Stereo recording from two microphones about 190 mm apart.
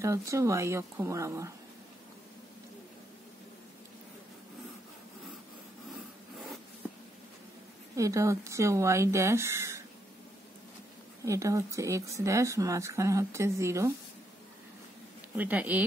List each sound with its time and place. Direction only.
0.0 s speech: 15° right (ahead or behind)
7.9 s speech: 15° right (ahead or behind)
11.2 s speech: 15° right (ahead or behind)
15.3 s speech: 10° right (ahead or behind)